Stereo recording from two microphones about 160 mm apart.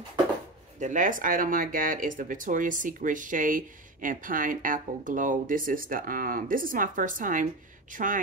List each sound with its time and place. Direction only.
0.7 s speech: 50° right (ahead or behind)